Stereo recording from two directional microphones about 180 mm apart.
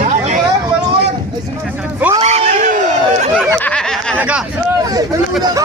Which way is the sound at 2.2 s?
40° right (ahead or behind).